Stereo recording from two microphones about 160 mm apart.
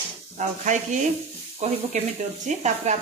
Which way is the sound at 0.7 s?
50° right (ahead or behind).